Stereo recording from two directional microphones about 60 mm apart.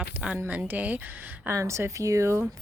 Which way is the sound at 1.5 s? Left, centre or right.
Right.